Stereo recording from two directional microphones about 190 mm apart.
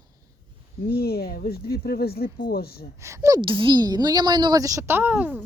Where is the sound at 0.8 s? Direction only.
55° left (ahead or behind).